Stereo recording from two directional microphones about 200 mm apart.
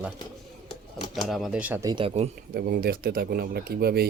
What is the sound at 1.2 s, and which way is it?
Speech, centre (ahead or behind).